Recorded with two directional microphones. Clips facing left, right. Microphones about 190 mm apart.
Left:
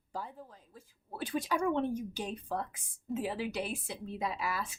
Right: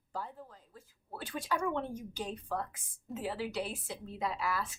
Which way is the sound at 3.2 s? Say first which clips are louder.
Right 2 dB; 15° left (ahead or behind).